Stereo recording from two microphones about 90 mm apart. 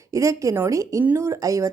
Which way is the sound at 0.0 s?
35° right (ahead or behind).